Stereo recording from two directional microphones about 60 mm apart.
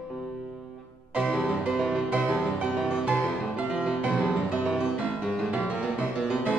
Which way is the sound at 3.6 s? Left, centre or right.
Centre.